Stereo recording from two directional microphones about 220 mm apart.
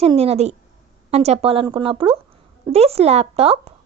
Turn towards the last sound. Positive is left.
turn(degrees=-25)  # may be behind; listen again after turning